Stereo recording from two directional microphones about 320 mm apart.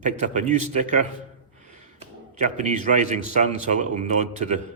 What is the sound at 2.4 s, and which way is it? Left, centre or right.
A man's voice, right.